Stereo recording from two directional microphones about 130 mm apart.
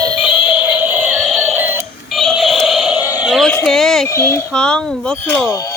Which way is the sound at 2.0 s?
Centre (ahead or behind).